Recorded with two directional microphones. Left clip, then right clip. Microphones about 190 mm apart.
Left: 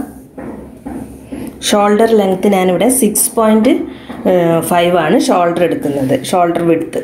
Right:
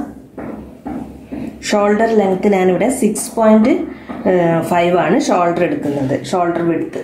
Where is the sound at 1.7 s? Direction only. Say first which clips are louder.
Left 4 dB; 40° left (ahead or behind).